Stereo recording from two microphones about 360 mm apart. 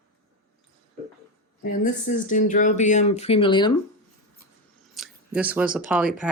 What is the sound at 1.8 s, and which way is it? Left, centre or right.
Speech, left.